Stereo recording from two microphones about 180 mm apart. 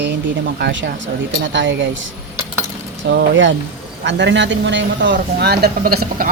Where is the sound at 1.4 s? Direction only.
90° right.